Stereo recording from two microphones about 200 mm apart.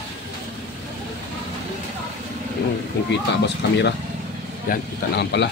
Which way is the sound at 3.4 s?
60° left (ahead or behind).